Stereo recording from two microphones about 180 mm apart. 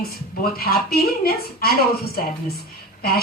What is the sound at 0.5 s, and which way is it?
Speech, 55° left (ahead or behind).